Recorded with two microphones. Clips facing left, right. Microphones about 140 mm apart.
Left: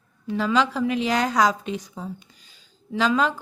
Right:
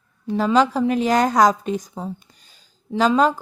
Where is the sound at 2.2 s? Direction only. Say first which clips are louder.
Even; 45° right (ahead or behind).